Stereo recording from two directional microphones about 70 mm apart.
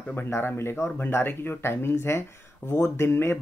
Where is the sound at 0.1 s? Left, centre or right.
Left.